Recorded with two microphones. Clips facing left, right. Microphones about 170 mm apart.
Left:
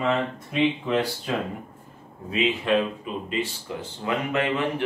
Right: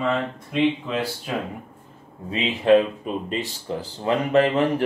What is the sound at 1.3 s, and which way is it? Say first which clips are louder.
Speech: even; 10° right (ahead or behind).